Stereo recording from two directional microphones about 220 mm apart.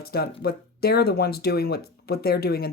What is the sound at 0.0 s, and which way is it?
Speech, 45° left (ahead or behind).